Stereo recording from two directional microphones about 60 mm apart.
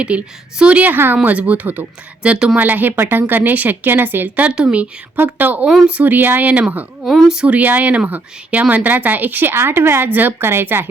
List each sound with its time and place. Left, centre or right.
0.0 s speech: right
2.6 s a woman's voice: right
4.4 s a woman's voice: right
7.0 s a sound: centre
7.4 s a woman's voice: right